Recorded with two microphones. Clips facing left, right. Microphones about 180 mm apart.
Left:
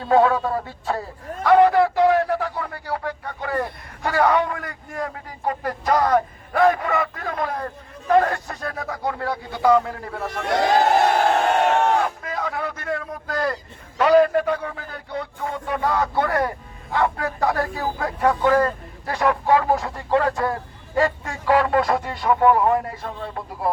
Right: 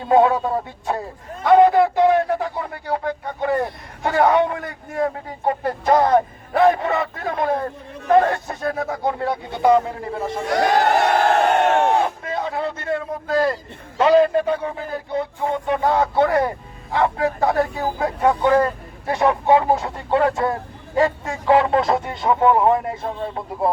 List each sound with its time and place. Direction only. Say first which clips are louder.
0.0 s a man's voice: right 2 dB; 20° right (ahead or behind)
11.9 s a sound: right 2 dB; 25° right (ahead or behind)
14.0 s a man's voice: right 1 dB; 25° right (ahead or behind)